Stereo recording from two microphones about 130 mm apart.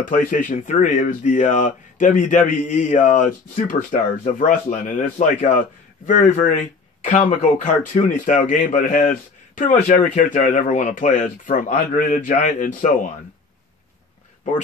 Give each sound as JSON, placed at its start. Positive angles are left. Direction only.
{"t": 0.0, "sound": "speech", "side_deg": 90}
{"t": 7.0, "sound": "speech", "side_deg": 70}